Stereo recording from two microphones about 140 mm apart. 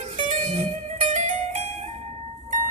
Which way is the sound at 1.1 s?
60° right (ahead or behind).